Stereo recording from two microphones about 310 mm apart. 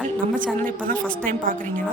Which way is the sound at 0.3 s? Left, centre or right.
Right.